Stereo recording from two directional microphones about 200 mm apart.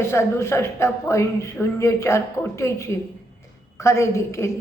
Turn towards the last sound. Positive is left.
turn(degrees=15)  # may be behind; listen again after turning